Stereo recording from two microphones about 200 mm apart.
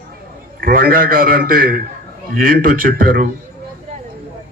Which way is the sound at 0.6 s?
45° right (ahead or behind).